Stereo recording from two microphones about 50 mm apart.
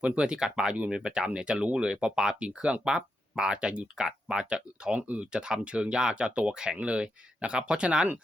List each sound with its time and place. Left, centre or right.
0.0 s speech: centre
4.9 s speech: right